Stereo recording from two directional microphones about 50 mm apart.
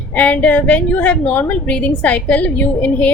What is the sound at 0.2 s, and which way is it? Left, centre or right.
A woman's voice, left.